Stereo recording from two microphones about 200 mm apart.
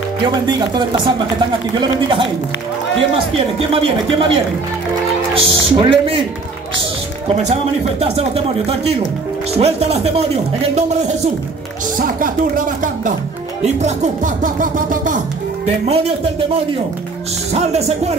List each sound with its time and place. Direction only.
0.2 s speech: 25° right (ahead or behind)
3.5 s speech: 25° right (ahead or behind)
5.3 s speech: 25° right (ahead or behind)
8.0 s speech: 30° right (ahead or behind)
9.6 s music: 30° right (ahead or behind)
12.0 s speech: 45° right (ahead or behind)
13.6 s music: 35° right (ahead or behind)
15.6 s music: 30° right (ahead or behind)
17.5 s music: 35° right (ahead or behind)